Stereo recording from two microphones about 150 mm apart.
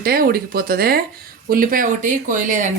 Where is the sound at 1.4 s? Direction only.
75° right (ahead or behind); by 2.7 s 55° right (ahead or behind).